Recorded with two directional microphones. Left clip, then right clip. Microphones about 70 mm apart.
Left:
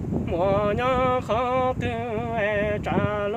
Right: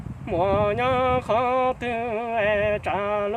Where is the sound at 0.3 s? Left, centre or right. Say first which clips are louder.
Right 1 dB; right.